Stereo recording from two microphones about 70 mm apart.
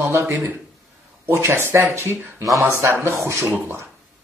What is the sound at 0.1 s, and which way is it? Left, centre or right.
A man's voice, right.